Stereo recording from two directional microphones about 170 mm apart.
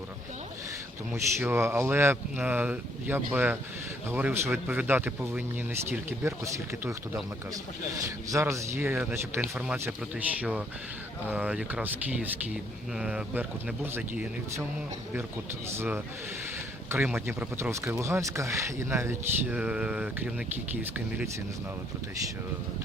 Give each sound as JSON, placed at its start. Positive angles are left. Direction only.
{"t": 1.1, "sound": "speech", "side_deg": -15}
{"t": 16.9, "sound": "speech", "side_deg": -15}